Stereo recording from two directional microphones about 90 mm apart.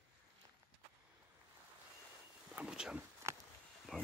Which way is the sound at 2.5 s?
10° right (ahead or behind).